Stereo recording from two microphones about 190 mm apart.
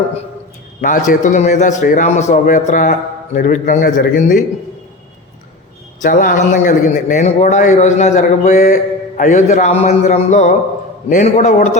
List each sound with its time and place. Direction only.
0.8 s a man's voice: 45° left (ahead or behind)
6.0 s a man's voice: 45° left (ahead or behind)